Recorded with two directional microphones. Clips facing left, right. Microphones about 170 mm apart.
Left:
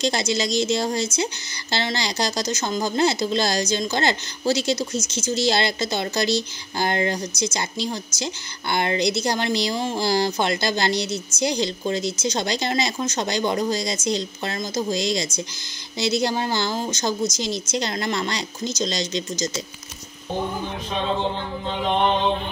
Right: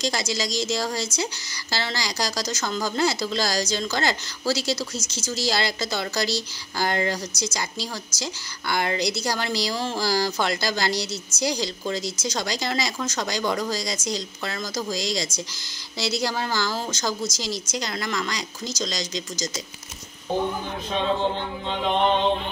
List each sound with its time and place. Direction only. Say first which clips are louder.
0.0 s a woman's voice: left 4 dB; 25° left (ahead or behind)